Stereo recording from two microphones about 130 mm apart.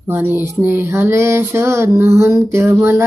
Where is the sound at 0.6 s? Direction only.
15° right (ahead or behind).